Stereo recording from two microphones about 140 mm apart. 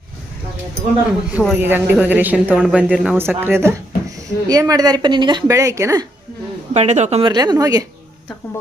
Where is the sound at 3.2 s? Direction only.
15° right (ahead or behind).